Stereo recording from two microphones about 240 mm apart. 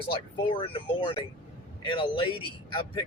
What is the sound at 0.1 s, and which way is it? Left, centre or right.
Speech, left.